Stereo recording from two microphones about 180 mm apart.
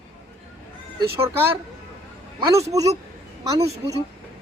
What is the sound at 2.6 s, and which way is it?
Speech, 20° right (ahead or behind).